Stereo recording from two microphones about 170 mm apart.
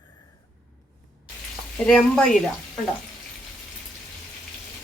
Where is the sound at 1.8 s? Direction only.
5° left (ahead or behind).